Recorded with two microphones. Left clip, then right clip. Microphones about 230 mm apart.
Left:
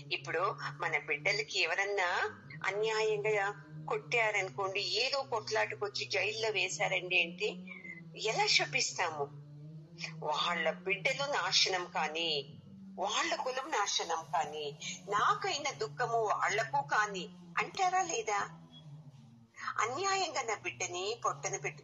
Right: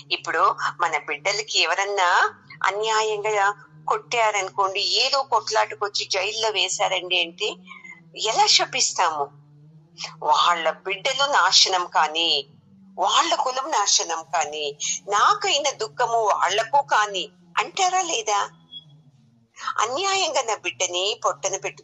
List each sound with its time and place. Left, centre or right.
0.1 s a woman's voice: right
19.8 s speech: right